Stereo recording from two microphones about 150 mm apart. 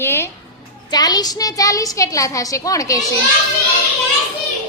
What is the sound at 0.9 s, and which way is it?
A child's voice, 25° left (ahead or behind).